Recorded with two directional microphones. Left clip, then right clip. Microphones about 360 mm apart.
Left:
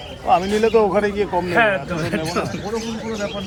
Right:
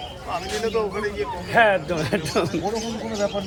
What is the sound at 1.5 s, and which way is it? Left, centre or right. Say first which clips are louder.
Speech: right 3 dB; right.